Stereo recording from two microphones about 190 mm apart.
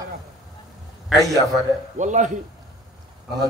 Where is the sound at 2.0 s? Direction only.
40° right (ahead or behind).